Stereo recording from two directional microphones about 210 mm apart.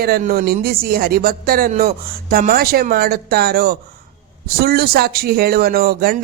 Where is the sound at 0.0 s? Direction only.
45° right (ahead or behind).